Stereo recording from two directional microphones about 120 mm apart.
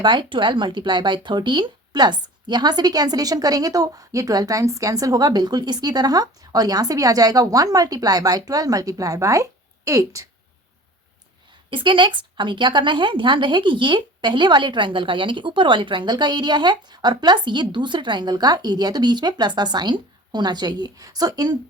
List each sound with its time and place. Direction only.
0.0 s speech: 40° right (ahead or behind)
11.7 s speech: 45° right (ahead or behind)